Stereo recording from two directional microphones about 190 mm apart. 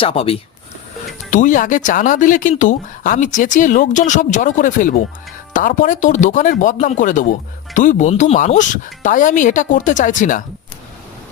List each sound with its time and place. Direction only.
0.0 s speech: 30° left (ahead or behind)
1.3 s speech: 45° left (ahead or behind)